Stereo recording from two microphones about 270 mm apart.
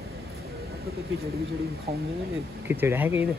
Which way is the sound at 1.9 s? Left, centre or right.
Right.